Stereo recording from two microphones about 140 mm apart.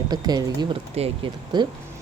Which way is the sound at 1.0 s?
45° right (ahead or behind).